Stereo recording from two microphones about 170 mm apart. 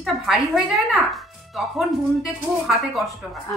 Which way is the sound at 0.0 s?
Centre (ahead or behind).